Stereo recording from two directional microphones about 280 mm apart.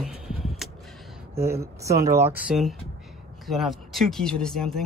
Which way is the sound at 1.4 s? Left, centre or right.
Centre.